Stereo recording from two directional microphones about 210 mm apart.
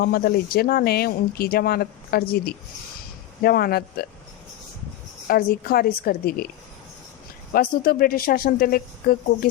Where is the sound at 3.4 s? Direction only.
45° left (ahead or behind).